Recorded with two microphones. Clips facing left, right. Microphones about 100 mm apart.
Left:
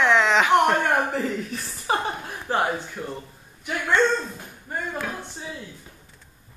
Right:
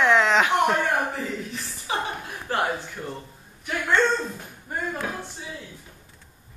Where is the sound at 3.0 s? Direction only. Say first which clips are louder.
Left 1 dB; 15° left (ahead or behind).